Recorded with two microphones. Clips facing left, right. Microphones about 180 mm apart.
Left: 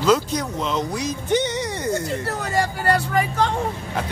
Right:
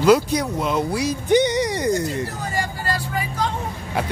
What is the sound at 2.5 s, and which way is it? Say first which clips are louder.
Speech: left 7 dB; 65° left (ahead or behind).